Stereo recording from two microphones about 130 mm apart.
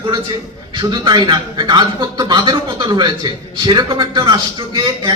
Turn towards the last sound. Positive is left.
turn(degrees=-35)  # may be behind; listen again after turning